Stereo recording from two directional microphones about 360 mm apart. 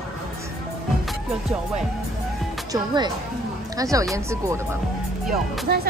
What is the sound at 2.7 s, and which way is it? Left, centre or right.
Speech, centre.